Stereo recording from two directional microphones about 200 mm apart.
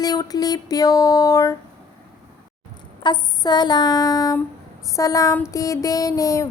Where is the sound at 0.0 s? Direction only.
20° left (ahead or behind).